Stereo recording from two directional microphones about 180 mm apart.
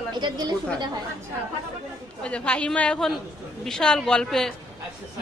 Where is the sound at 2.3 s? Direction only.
5° left (ahead or behind).